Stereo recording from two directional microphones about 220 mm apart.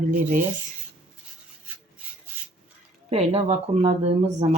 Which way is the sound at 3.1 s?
30° right (ahead or behind).